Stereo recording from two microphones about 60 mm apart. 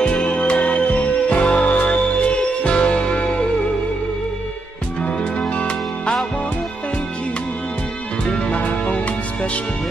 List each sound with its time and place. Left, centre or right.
0.0 s music: centre
5.4 s music: centre
8.3 s music: left